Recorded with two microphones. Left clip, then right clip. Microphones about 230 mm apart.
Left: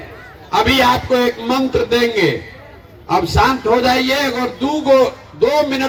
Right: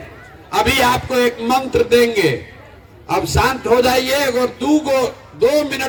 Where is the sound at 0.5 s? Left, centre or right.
Right.